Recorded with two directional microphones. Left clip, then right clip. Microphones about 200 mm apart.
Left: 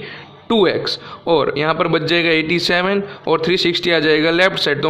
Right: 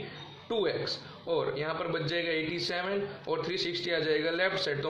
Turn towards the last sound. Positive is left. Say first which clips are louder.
# left 14 dB
turn(degrees=50)  # may be behind; listen again after turning